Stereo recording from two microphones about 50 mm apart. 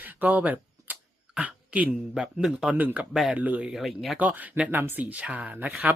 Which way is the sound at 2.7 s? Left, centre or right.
Right.